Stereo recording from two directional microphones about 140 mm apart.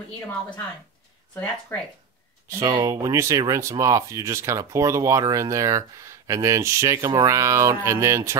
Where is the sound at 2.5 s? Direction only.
20° right (ahead or behind).